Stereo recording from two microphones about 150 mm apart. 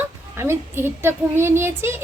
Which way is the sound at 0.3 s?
15° right (ahead or behind).